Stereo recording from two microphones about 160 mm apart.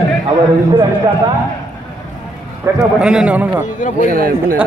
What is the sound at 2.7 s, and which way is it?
Speech, 20° right (ahead or behind).